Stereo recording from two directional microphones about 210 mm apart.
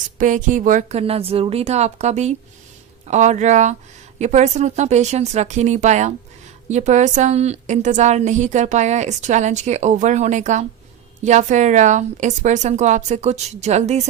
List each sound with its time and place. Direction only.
0.2 s a woman's voice: 35° right (ahead or behind)